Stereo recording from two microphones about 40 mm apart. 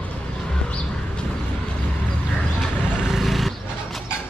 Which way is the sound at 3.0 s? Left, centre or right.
Centre.